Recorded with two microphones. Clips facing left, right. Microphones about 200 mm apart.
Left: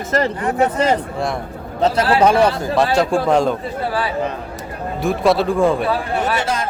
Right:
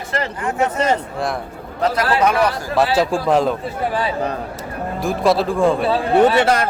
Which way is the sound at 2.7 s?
5° right (ahead or behind).